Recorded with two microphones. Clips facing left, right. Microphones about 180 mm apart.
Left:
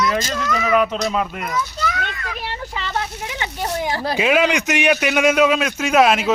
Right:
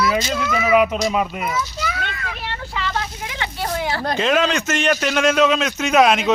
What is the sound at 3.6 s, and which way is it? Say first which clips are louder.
A man's voice: even; 15° left (ahead or behind).